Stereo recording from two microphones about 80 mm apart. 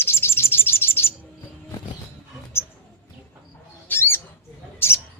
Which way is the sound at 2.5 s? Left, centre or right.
Left.